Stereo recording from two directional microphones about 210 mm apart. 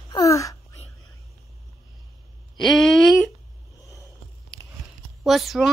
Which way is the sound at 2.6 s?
Centre (ahead or behind).